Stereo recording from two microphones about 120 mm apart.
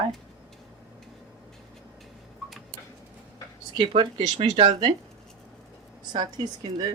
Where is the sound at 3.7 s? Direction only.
45° right (ahead or behind).